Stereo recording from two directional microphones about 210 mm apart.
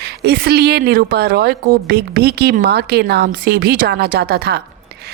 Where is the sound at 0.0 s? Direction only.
50° right (ahead or behind).